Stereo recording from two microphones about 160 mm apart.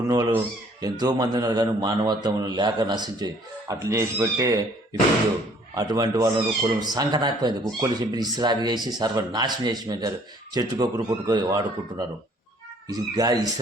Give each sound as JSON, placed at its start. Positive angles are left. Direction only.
{"t": 0.1, "sound": "a man's voice", "side_deg": -25}
{"t": 5.7, "sound": "a man's voice", "side_deg": -25}